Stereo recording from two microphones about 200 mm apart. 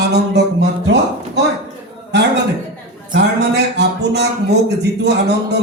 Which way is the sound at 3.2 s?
55° right (ahead or behind).